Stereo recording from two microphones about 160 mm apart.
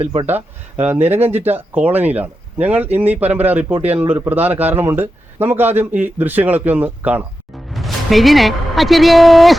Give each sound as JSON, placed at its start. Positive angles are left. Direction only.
{"t": 0.0, "sound": "speech", "side_deg": -35}
{"t": 0.3, "sound": "a woman's voice", "side_deg": -10}